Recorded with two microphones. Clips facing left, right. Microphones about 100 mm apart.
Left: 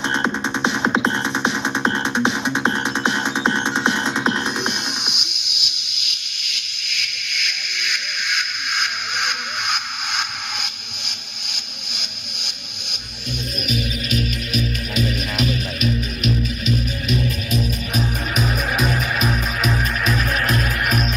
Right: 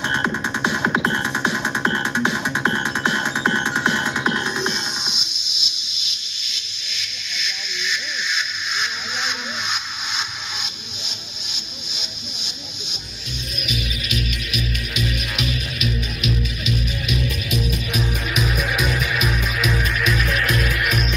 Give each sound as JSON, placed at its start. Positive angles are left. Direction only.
{"t": 0.1, "sound": "music", "side_deg": 25}
{"t": 5.0, "sound": "a sound", "side_deg": 60}
{"t": 13.7, "sound": "music", "side_deg": 40}